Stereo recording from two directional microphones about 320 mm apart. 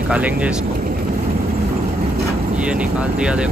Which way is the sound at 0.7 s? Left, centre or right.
Right.